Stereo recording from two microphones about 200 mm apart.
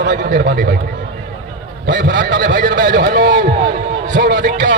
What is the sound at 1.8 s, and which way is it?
A man's voice, 60° right (ahead or behind).